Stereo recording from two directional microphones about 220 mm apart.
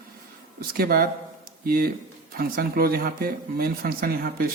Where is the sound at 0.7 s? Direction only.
40° right (ahead or behind).